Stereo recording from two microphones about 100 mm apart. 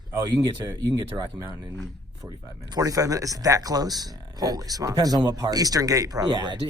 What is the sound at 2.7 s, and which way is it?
Speech, 35° right (ahead or behind).